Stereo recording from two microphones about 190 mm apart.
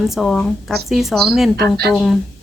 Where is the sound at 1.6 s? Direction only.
55° right (ahead or behind).